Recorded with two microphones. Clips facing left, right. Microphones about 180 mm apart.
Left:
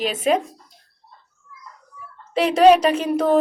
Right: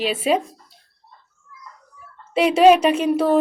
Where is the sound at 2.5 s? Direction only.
5° right (ahead or behind).